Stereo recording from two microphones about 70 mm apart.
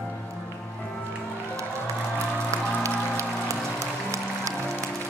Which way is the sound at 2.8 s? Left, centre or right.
Right.